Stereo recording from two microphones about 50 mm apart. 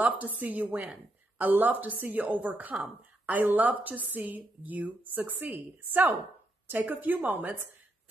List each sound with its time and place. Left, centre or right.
0.0 s a woman's voice: right